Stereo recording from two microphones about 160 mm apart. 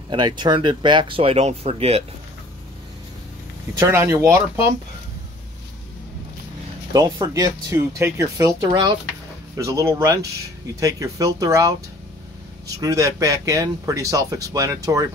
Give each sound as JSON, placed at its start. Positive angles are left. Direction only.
{"t": 0.1, "sound": "speech", "side_deg": -30}
{"t": 3.7, "sound": "speech", "side_deg": -15}
{"t": 6.9, "sound": "speech", "side_deg": -20}